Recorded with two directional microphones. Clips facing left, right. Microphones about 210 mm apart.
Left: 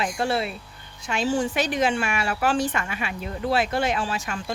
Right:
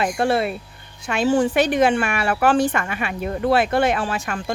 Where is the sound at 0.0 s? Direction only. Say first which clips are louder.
Right 5 dB; 55° right (ahead or behind).